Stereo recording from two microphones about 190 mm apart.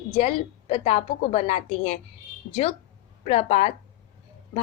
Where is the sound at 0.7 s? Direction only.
35° left (ahead or behind).